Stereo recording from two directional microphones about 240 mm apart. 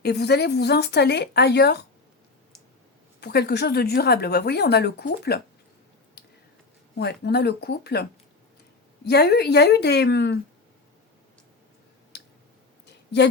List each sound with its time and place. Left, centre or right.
0.0 s speech: left
3.2 s speech: left
6.9 s speech: left
9.0 s speech: left
12.1 s clicking: left